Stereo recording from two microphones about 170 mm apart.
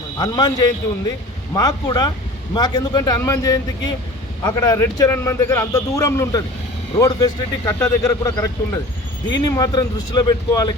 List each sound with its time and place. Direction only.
0.2 s speech: 25° left (ahead or behind)